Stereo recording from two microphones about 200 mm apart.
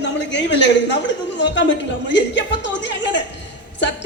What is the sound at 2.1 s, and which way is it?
A woman's voice, 65° left (ahead or behind).